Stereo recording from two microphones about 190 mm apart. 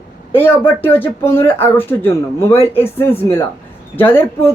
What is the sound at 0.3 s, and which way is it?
Speech, 10° left (ahead or behind).